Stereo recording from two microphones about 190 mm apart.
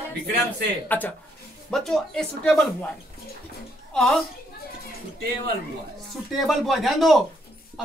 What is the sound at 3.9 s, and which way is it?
Speech, centre (ahead or behind).